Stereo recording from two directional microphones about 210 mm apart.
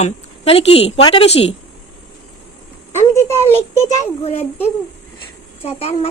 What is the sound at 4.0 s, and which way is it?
A woman's voice, 30° left (ahead or behind).